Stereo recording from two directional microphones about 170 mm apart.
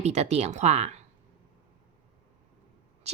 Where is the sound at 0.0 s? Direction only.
40° right (ahead or behind).